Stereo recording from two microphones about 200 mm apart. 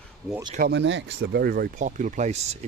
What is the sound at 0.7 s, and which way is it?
Speech, 60° right (ahead or behind).